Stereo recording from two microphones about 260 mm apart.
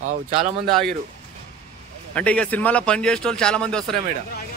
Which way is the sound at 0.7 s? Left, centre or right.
Centre.